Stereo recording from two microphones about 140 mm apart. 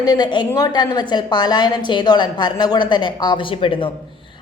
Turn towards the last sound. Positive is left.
turn(degrees=40)  # may be behind; listen again after turning